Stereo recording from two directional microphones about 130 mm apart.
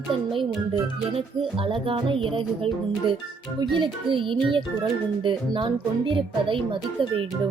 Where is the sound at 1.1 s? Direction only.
45° right (ahead or behind).